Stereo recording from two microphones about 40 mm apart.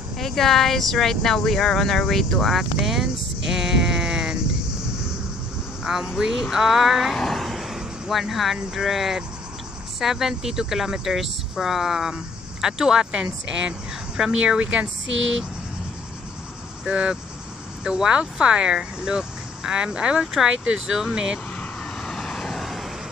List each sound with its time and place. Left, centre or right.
0.2 s speech: centre
5.9 s speech: centre
7.2 s vehicle: centre
7.7 s a sound: centre
8.7 s a woman's voice: centre; by 14.9 s right
16.8 s speech: right
22.0 s vehicle: centre